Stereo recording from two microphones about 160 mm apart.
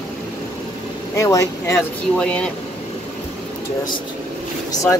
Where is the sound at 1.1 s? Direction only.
20° left (ahead or behind).